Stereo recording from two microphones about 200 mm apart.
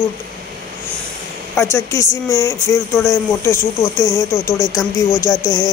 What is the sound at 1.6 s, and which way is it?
Speech, 15° left (ahead or behind).